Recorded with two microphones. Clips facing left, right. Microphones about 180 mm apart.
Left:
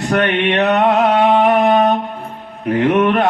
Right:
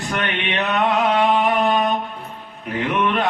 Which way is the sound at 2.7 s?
55° left (ahead or behind).